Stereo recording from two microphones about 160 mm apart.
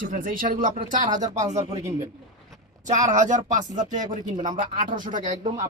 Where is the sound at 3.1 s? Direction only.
50° right (ahead or behind).